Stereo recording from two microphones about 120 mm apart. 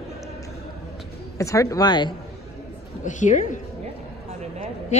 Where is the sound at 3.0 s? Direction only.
90° left.